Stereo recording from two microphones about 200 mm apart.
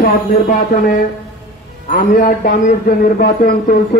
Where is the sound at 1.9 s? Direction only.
45° left (ahead or behind).